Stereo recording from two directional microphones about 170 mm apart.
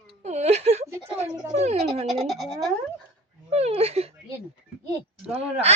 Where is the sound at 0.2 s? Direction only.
40° right (ahead or behind).